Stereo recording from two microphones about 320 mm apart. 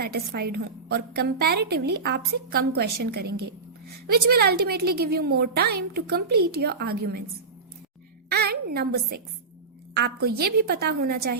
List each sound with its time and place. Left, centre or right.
0.5 s a woman's voice: right
8.3 s a woman's voice: right